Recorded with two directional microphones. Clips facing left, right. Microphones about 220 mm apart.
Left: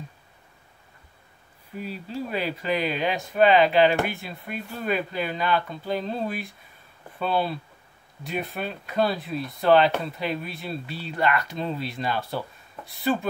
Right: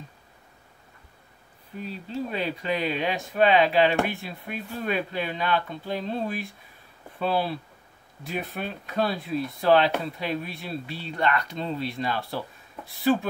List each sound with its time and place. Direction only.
1.8 s speech: 10° left (ahead or behind)